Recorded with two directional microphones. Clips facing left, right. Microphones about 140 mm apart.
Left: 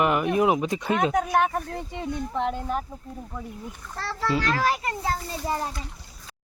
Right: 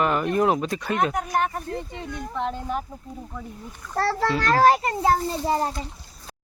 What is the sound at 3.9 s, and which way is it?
Speech, 50° right (ahead or behind).